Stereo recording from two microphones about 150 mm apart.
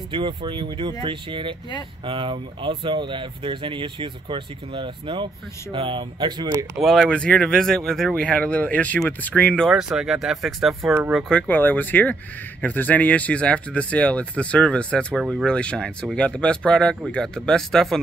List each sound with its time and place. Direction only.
0.1 s speech: 35° right (ahead or behind)
6.8 s speech: centre (ahead or behind)
9.7 s speech: 5° right (ahead or behind)